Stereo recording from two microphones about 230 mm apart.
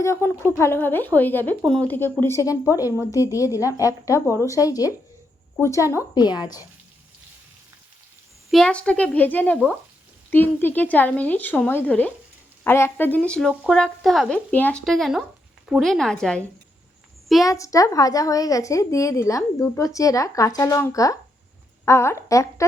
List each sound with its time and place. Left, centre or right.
0.0 s speech: centre
8.4 s speech: centre
17.4 s speech: centre